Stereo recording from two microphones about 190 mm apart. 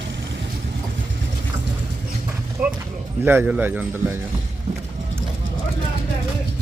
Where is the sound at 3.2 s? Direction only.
10° right (ahead or behind).